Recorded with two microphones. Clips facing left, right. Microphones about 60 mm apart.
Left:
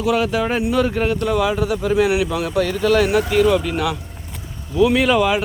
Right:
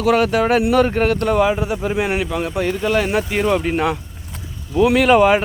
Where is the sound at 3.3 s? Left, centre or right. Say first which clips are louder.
Left 1 dB; right.